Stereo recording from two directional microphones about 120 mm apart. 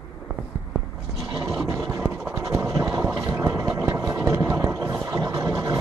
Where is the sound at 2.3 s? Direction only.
25° right (ahead or behind).